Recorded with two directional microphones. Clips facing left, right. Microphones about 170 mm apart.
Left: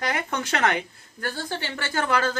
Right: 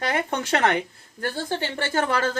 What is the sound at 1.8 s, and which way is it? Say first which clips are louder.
Speech: even; 25° right (ahead or behind).